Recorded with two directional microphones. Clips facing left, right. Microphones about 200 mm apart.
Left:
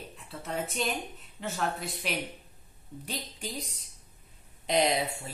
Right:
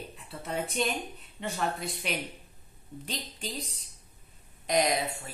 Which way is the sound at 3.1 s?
10° left (ahead or behind).